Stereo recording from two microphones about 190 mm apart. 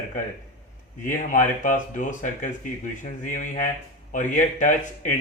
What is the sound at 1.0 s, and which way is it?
Speech, 45° left (ahead or behind).